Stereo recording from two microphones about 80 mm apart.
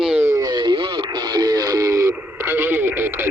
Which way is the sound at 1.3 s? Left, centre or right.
Right.